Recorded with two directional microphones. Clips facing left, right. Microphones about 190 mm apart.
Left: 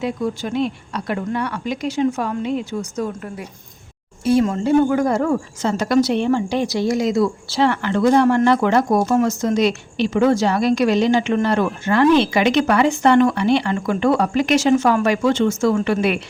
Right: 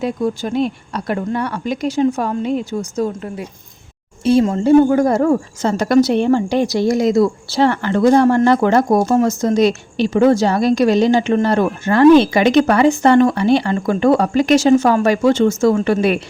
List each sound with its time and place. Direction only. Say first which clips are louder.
0.0 s a woman's voice: right 3 dB; 40° right (ahead or behind)